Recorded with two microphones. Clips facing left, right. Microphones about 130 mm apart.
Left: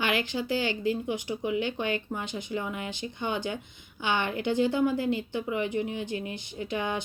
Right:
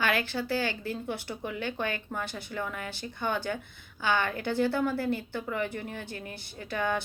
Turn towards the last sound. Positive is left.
turn(degrees=15)  # may be behind; listen again after turning